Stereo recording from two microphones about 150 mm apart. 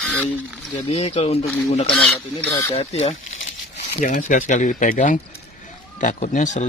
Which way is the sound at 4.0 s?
60° left (ahead or behind).